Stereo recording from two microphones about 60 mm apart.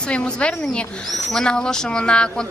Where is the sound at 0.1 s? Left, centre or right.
Centre.